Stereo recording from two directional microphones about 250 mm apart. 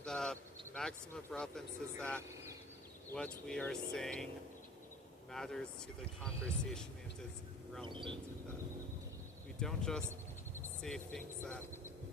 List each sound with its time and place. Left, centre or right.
0.0 s speech: centre
5.3 s speech: centre
7.9 s speech: centre
9.6 s speech: centre
10.5 s cricket: centre
11.4 s speech: centre